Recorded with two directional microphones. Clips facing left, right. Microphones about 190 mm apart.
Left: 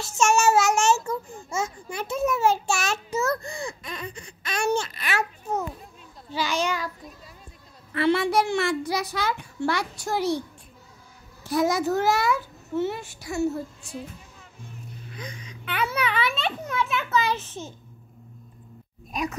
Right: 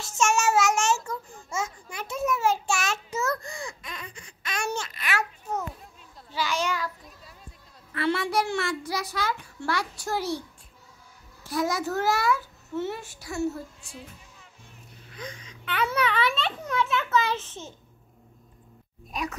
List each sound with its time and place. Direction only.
0.0 s child singing: 35° left (ahead or behind)
4.7 s a sound: 30° left (ahead or behind)
6.3 s child singing: 20° left (ahead or behind)
7.9 s a child's voice: 25° left (ahead or behind)
11.4 s a child's voice: 20° left (ahead or behind)
13.8 s music: 45° left (ahead or behind)
15.1 s a child's voice: 15° left (ahead or behind)